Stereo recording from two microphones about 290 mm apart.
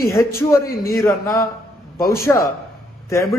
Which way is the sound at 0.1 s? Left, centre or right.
Centre.